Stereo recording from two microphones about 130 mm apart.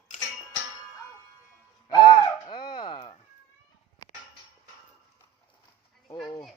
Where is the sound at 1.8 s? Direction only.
35° left (ahead or behind).